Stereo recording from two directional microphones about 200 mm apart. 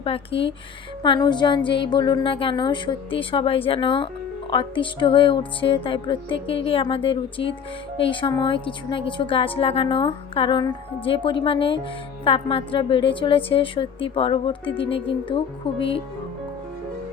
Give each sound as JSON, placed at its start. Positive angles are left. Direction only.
{"t": 0.0, "sound": "a woman's voice", "side_deg": 25}